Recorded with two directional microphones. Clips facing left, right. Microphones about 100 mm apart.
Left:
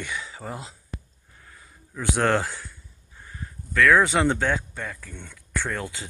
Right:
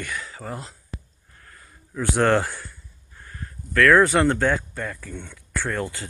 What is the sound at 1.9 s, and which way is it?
Speech, 5° right (ahead or behind).